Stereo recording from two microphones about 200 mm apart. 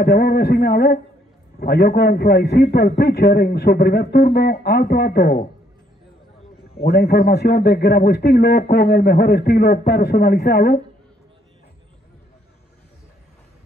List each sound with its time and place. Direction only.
0.0 s a man's voice: 50° left (ahead or behind)
6.8 s a man's voice: 50° left (ahead or behind)